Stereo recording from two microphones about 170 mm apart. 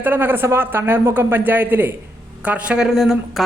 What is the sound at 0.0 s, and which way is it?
Speech, 10° right (ahead or behind).